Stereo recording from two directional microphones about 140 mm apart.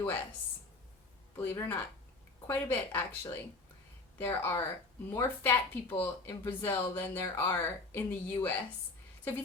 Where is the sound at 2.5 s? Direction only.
15° left (ahead or behind).